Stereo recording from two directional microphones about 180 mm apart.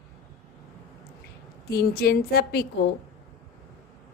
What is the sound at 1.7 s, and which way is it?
Speech, 60° left (ahead or behind).